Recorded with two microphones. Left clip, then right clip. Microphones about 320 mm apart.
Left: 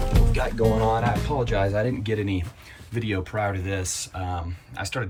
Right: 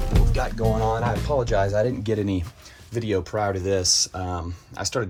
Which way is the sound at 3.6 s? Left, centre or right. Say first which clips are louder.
Right 9 dB; centre.